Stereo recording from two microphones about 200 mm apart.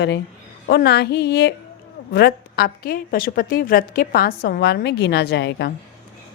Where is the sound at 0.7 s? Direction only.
55° left (ahead or behind).